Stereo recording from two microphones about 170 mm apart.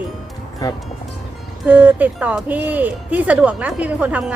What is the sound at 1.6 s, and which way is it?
Speech, 10° right (ahead or behind).